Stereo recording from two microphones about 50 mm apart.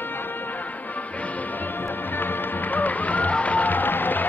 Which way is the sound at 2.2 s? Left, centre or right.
Left.